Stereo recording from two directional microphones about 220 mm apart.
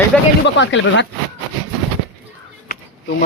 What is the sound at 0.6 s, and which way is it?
Speech, 55° left (ahead or behind).